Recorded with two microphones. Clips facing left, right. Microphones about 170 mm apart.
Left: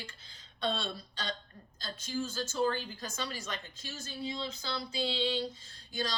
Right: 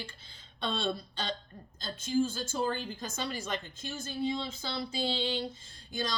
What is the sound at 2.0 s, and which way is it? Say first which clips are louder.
Speech: right 6 dB; 50° right (ahead or behind).